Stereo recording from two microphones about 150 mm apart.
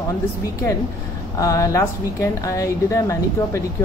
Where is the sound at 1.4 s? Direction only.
20° left (ahead or behind).